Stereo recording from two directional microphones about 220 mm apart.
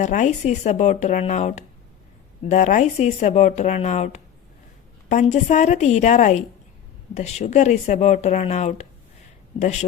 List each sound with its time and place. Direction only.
0.0 s speech: 35° left (ahead or behind)